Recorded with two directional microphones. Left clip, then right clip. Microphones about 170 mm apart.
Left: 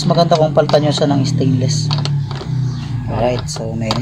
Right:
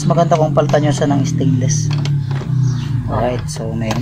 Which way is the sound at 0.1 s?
30° left (ahead or behind).